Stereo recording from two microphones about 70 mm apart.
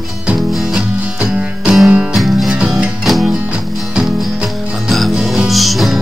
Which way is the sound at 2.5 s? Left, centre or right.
Centre.